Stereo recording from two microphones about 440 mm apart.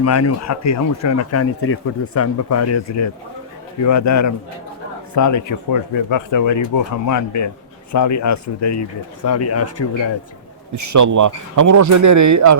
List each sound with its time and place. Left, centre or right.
0.0 s speech: left
10.8 s speech: right